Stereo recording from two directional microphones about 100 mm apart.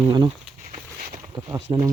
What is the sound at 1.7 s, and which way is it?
Speech, 90° right.